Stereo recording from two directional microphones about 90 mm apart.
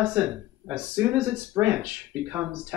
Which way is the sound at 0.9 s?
10° right (ahead or behind).